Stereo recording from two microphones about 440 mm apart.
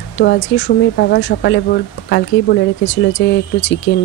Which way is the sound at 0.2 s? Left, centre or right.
Left.